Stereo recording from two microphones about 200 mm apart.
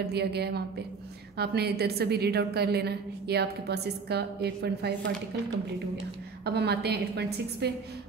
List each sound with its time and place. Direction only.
0.0 s a woman's voice: 55° right (ahead or behind)
6.4 s a woman's voice: 55° right (ahead or behind)